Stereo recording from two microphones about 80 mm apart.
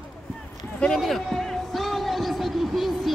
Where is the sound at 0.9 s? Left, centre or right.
Centre.